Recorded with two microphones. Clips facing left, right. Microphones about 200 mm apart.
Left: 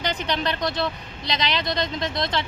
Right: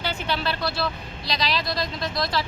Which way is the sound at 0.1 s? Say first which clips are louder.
Left 1 dB; 15° left (ahead or behind).